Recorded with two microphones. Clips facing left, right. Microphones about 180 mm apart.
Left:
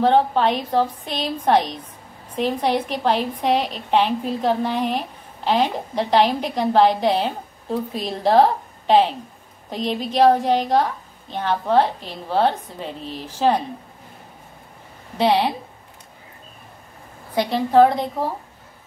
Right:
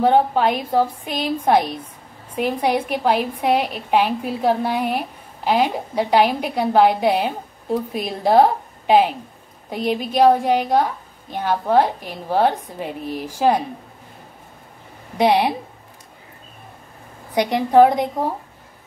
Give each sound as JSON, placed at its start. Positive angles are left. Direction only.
{"t": 0.0, "sound": "a woman's voice", "side_deg": -10}
{"t": 15.1, "sound": "a woman's voice", "side_deg": -15}
{"t": 17.3, "sound": "a woman's voice", "side_deg": -15}